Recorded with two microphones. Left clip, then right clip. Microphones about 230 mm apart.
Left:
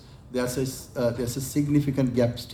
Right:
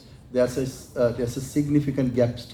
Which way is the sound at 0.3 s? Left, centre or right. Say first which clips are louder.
Right 5 dB; left.